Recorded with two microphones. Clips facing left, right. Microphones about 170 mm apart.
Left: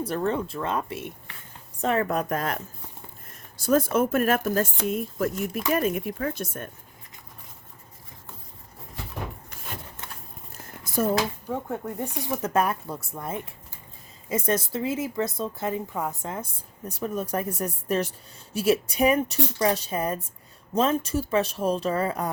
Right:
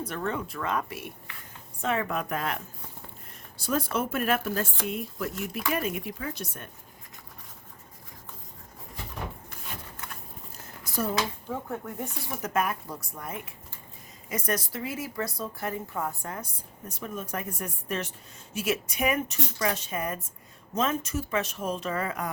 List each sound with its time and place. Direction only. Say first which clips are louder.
0.0 s a woman's voice: left 5 dB; 30° left (ahead or behind)
1.8 s speech: left 4 dB; 40° left (ahead or behind)
3.6 s speech: left 7 dB; 45° left (ahead or behind)
10.8 s a sound: left 6 dB; 50° left (ahead or behind)
11.7 s speech: left 4 dB; 20° left (ahead or behind)
12.4 s a woman's voice: left 3 dB; 30° left (ahead or behind)
16.9 s speech: left 7 dB; 35° left (ahead or behind)